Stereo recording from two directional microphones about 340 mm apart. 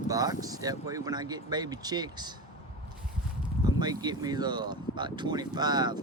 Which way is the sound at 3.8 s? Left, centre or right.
Centre.